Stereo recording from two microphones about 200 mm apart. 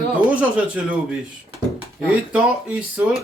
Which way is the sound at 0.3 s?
5° right (ahead or behind).